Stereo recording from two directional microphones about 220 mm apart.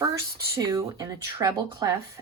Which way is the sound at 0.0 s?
15° right (ahead or behind).